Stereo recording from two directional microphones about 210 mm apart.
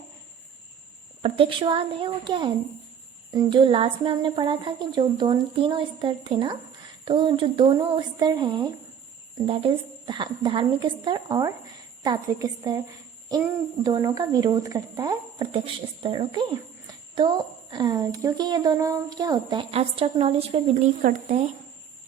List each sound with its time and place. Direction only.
1.2 s a woman's voice: 25° right (ahead or behind)
13.8 s speech: 15° right (ahead or behind); by 21.4 s 35° right (ahead or behind)